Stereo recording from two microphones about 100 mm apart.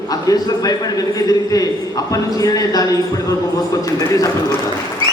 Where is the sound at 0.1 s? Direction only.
40° left (ahead or behind).